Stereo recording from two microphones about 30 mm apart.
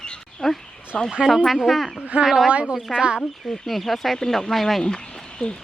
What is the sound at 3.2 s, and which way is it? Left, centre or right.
Speech, centre.